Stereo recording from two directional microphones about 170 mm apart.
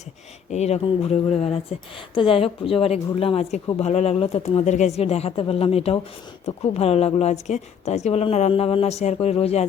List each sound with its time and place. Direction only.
0.5 s a woman's voice: 40° left (ahead or behind)